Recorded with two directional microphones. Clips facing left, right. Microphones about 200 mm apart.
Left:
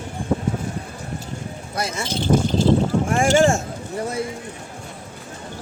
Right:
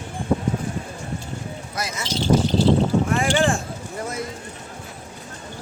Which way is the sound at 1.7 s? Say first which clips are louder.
Left 5 dB; 30° left (ahead or behind).